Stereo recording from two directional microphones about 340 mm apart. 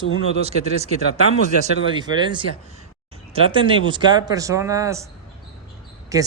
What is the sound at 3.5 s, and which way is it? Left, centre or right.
Speech, centre.